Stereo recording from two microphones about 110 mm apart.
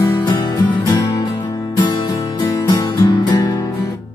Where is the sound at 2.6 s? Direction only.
40° left (ahead or behind).